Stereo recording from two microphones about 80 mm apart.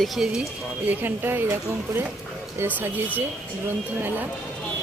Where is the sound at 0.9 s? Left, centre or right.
Right.